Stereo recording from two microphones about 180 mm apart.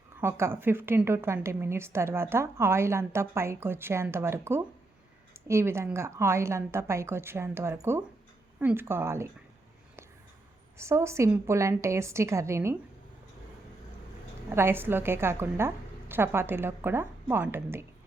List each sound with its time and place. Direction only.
0.2 s a woman's voice: 15° right (ahead or behind)
10.8 s a woman's voice: 15° right (ahead or behind)
14.5 s a woman's voice: 15° right (ahead or behind)